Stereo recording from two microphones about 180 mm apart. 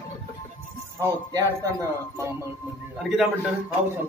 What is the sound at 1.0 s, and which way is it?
Speech, 15° right (ahead or behind).